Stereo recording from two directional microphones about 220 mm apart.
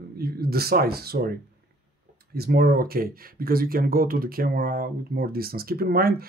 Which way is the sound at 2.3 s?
45° right (ahead or behind).